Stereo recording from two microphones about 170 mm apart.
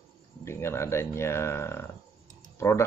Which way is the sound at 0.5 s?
15° left (ahead or behind).